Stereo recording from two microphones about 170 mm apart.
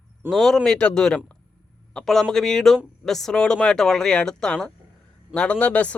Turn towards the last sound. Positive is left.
turn(degrees=5)  # may be behind; listen again after turning